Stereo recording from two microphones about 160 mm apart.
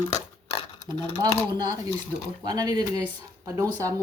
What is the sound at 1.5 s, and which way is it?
Speech, 25° right (ahead or behind).